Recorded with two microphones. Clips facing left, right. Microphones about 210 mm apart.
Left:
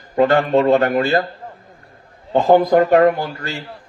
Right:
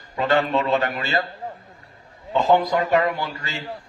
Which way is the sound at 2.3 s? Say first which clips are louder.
Left 6 dB; 50° left (ahead or behind).